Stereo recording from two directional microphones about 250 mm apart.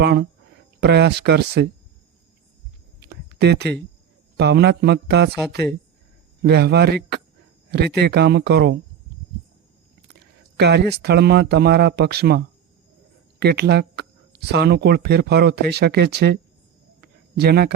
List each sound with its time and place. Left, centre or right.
0.0 s speech: right
3.0 s a sound: right
4.4 s speech: right
6.4 s speech: right
10.2 s speech: right
13.4 s speech: right
17.0 s a sound: right